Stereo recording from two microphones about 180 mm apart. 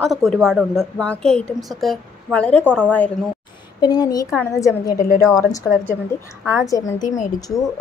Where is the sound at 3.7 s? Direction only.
20° left (ahead or behind).